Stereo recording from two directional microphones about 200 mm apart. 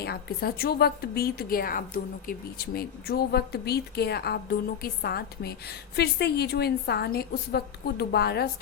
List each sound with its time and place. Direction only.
0.0 s a woman's voice: 50° left (ahead or behind)